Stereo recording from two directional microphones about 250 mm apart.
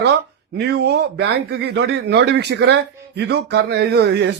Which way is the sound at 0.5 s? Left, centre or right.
Right.